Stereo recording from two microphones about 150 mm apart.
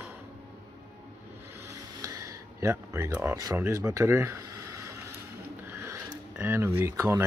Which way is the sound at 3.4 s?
20° right (ahead or behind).